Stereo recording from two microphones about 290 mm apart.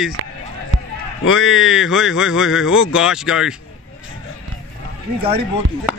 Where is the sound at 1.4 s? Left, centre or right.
Centre.